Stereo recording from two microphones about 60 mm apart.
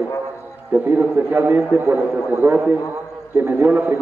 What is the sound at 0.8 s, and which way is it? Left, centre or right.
A man's voice, right.